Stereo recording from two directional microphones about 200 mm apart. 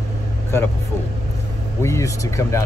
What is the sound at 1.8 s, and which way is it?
Speech, 15° left (ahead or behind).